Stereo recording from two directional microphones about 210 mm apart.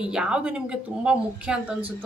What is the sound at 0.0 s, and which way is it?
A woman's voice, 5° right (ahead or behind).